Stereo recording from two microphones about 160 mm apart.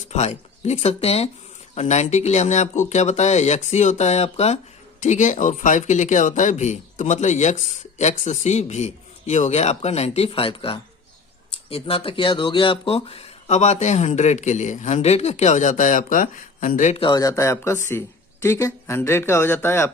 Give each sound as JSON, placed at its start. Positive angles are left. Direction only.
{"t": 0.1, "sound": "speech", "side_deg": 45}
{"t": 17.0, "sound": "speech", "side_deg": 25}